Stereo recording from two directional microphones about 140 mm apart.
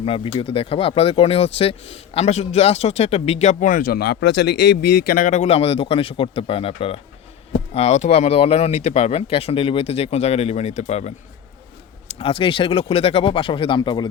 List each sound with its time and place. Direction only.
0.0 s speech: 40° left (ahead or behind); by 4.0 s 90° left
5.0 s speech: 85° left; by 11.1 s 55° left (ahead or behind)
12.0 s speech: 40° left (ahead or behind)